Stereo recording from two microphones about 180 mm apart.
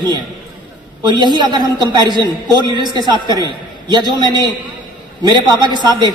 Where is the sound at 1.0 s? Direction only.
25° right (ahead or behind).